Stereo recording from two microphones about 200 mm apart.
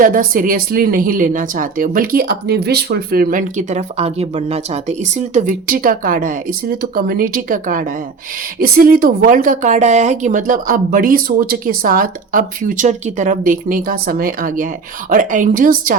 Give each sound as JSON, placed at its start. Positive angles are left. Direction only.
{"t": 0.0, "sound": "a woman's voice", "side_deg": -45}